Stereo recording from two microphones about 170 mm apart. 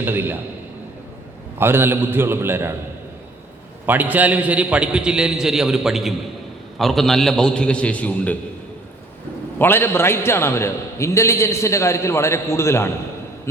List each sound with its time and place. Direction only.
0.0 s a man's voice: 10° right (ahead or behind)
1.5 s a man's voice: 15° right (ahead or behind)
3.8 s a man's voice: 10° right (ahead or behind); by 8.4 s 10° left (ahead or behind)
9.6 s a man's voice: 15° left (ahead or behind)